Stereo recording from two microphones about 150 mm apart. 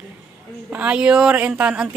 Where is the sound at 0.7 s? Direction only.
10° right (ahead or behind).